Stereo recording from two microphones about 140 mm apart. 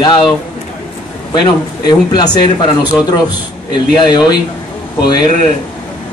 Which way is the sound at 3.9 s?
30° left (ahead or behind).